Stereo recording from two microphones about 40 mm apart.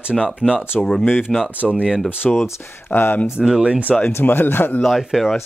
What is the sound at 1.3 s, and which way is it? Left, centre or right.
Speech, centre.